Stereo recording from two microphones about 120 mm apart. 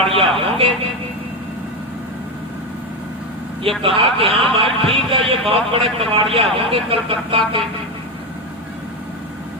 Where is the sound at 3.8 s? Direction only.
50° right (ahead or behind).